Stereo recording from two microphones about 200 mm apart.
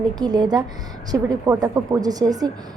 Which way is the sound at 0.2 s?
20° right (ahead or behind).